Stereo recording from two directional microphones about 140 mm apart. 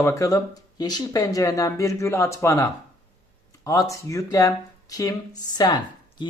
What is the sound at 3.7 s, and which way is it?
Speech, 20° left (ahead or behind).